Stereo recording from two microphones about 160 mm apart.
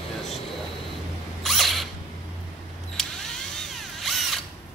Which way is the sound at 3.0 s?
5° left (ahead or behind).